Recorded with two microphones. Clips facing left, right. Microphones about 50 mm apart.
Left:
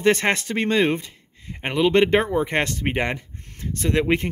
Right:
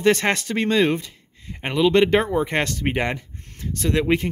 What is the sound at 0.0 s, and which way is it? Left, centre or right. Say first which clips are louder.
Speech: even; left.